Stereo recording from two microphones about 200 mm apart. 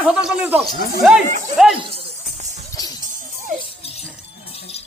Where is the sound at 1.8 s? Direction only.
30° right (ahead or behind).